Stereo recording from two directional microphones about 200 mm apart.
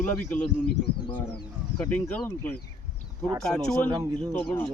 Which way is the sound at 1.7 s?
5° left (ahead or behind).